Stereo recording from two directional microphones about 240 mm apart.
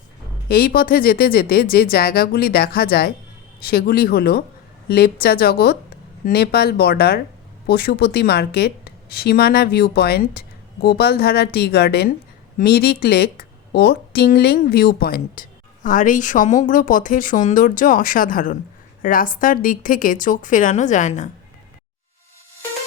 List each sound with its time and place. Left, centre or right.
0.4 s a woman's voice: left